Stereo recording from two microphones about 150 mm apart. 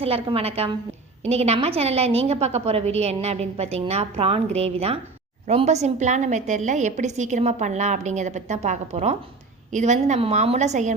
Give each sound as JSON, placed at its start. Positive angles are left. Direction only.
{"t": 0.0, "sound": "a woman's voice", "side_deg": -40}